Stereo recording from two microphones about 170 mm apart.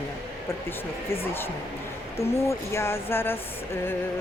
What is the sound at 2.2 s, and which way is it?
Speech, 15° left (ahead or behind).